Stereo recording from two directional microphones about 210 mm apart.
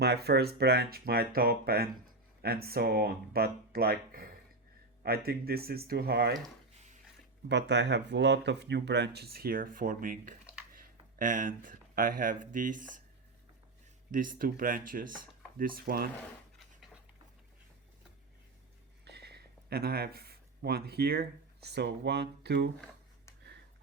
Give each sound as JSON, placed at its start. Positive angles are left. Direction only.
{"t": 0.0, "sound": "speech", "side_deg": -50}
{"t": 7.4, "sound": "speech", "side_deg": -55}
{"t": 14.1, "sound": "speech", "side_deg": -40}
{"t": 19.0, "sound": "speech", "side_deg": -50}